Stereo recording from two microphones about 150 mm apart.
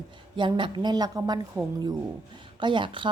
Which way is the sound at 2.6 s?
30° right (ahead or behind).